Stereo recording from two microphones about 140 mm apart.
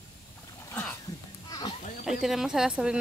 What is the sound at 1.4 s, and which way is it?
Goat, 30° left (ahead or behind).